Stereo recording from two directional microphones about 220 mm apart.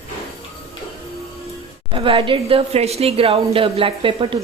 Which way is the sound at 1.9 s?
25° right (ahead or behind).